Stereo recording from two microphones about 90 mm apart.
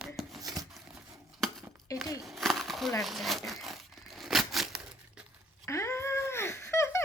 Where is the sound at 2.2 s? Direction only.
Centre (ahead or behind).